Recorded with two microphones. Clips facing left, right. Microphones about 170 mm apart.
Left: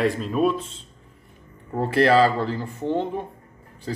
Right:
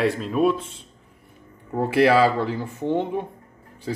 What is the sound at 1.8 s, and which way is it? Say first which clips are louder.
Speech: even; 10° right (ahead or behind).